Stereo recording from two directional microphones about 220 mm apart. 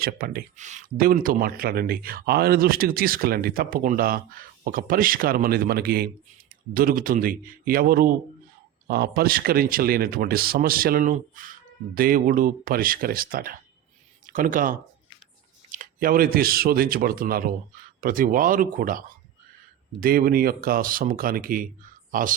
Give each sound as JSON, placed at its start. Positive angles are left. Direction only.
{"t": 0.0, "sound": "speech", "side_deg": -40}